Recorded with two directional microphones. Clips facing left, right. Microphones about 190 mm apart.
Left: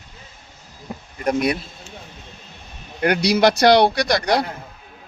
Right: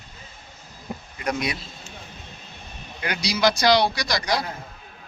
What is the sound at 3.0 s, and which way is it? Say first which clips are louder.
Speech: left 7 dB; 60° left (ahead or behind).